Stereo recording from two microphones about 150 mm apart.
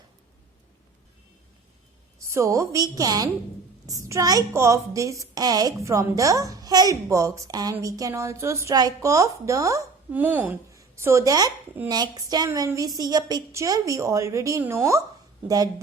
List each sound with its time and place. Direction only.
2.3 s a woman's voice: 20° right (ahead or behind)